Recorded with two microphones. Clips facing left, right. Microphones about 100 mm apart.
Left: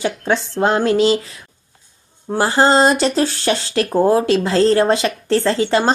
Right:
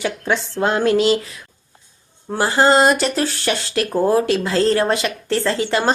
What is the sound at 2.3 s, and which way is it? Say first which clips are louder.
Speech: left 1 dB; 30° left (ahead or behind).